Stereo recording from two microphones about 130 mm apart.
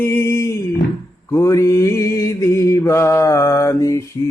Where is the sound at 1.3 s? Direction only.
25° left (ahead or behind).